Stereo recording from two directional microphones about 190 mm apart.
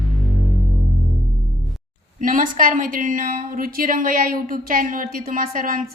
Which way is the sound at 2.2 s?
45° right (ahead or behind).